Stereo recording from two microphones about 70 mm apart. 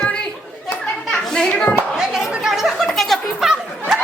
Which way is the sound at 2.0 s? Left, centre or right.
Centre.